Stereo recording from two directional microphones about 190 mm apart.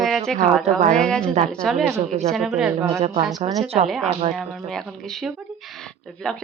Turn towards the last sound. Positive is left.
turn(degrees=5)  # may be behind; listen again after turning